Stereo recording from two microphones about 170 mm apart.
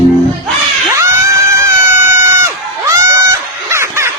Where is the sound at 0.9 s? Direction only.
15° right (ahead or behind).